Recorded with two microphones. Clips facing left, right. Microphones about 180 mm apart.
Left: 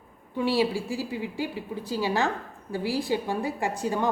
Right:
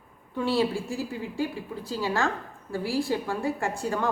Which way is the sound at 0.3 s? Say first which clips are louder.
Left 1 dB; 15° left (ahead or behind).